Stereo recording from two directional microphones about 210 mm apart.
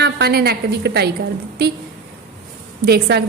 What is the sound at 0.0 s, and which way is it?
A woman's voice, 50° right (ahead or behind).